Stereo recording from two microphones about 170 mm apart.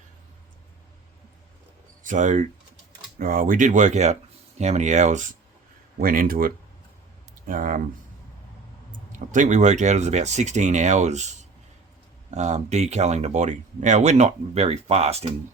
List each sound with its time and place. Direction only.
2.0 s speech: 45° right (ahead or behind)
3.2 s speech: 55° right (ahead or behind)
6.0 s speech: 55° right (ahead or behind)
9.1 s speech: 45° right (ahead or behind)
12.3 s speech: 45° right (ahead or behind)